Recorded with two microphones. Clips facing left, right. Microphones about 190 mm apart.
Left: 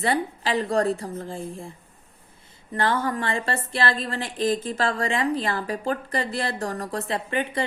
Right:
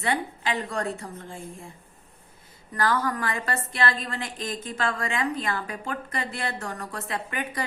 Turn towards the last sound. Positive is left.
turn(degrees=25)  # may be behind; listen again after turning